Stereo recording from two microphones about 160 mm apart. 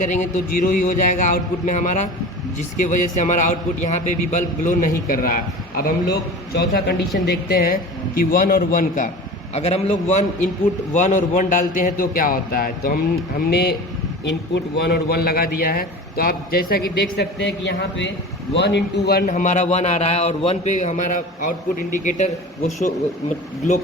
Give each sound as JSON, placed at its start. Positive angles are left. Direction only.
{"t": 0.0, "sound": "a man's voice", "side_deg": 50}
{"t": 7.3, "sound": "a man's voice", "side_deg": 75}
{"t": 9.6, "sound": "a man's voice", "side_deg": 40}
{"t": 13.4, "sound": "a man's voice", "side_deg": 80}
{"t": 19.3, "sound": "a man's voice", "side_deg": 50}